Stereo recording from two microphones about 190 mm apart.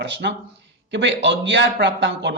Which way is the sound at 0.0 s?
65° right (ahead or behind).